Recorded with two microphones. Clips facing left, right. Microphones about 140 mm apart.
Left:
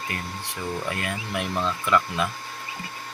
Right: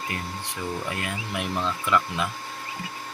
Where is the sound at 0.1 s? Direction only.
20° right (ahead or behind).